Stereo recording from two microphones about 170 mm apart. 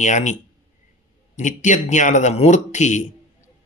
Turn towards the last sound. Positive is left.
turn(degrees=45)  # may be behind; listen again after turning